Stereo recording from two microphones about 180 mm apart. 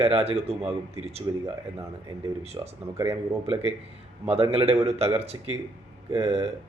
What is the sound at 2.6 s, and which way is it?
Speech, 20° right (ahead or behind).